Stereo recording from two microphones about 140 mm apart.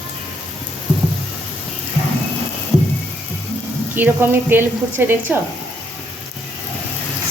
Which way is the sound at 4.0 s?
15° right (ahead or behind).